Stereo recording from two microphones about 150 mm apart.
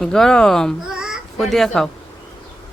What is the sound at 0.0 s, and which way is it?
Speech, 5° left (ahead or behind).